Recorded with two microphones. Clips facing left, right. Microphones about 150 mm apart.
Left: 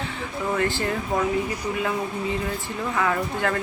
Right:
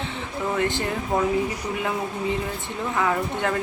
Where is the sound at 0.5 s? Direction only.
20° right (ahead or behind).